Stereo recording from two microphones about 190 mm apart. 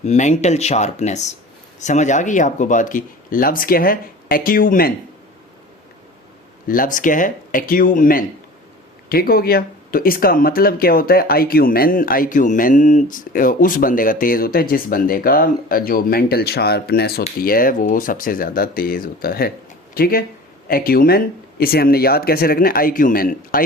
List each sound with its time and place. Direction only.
0.0 s speech: 35° left (ahead or behind)
6.7 s speech: 45° left (ahead or behind)